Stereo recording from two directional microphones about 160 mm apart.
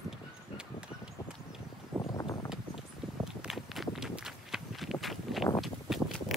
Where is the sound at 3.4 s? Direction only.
Centre (ahead or behind).